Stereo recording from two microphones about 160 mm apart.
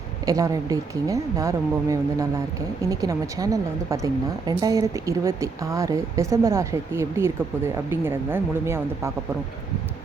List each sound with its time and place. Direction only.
0.3 s a woman's voice: 20° right (ahead or behind)